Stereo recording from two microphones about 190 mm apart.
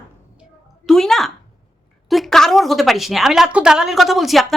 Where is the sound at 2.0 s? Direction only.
Centre (ahead or behind).